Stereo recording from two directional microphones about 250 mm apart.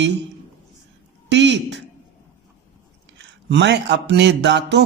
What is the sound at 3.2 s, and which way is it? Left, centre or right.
Speech, right.